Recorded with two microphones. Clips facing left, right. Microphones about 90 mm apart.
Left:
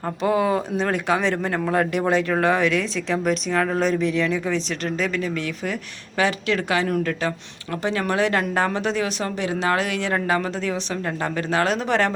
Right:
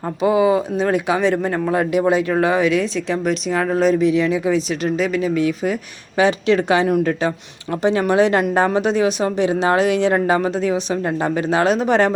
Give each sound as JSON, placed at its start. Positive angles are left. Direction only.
{"t": 0.2, "sound": "a woman's voice", "side_deg": -5}